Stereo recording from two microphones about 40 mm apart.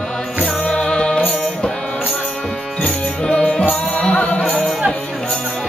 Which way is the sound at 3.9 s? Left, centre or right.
Left.